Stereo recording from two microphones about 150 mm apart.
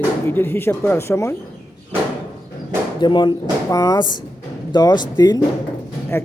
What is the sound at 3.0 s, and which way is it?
Speech, 30° left (ahead or behind).